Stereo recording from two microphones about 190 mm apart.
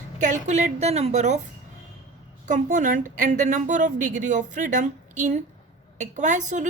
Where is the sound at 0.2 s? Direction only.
40° right (ahead or behind).